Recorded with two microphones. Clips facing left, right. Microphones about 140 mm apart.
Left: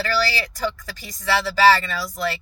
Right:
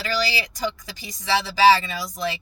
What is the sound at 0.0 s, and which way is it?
Speech, 15° right (ahead or behind).